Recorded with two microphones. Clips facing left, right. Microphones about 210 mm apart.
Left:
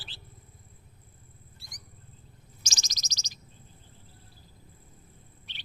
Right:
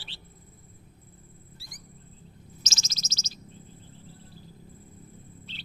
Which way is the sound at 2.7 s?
15° left (ahead or behind).